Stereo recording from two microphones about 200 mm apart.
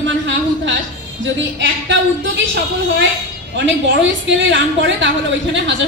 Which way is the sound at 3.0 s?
65° right (ahead or behind).